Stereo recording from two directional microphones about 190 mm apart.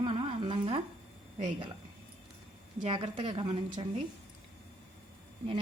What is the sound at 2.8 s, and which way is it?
Speech, 25° right (ahead or behind).